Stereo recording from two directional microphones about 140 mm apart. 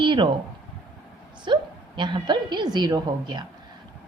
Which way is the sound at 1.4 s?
35° right (ahead or behind).